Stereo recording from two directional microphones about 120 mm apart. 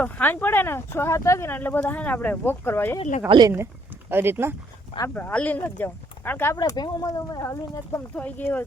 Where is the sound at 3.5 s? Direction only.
20° right (ahead or behind).